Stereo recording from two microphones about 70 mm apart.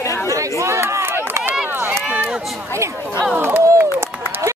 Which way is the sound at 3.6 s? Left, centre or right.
Right.